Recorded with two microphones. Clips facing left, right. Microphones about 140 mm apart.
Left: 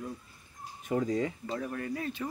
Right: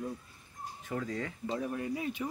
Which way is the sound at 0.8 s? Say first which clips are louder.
Left 7 dB; 20° left (ahead or behind).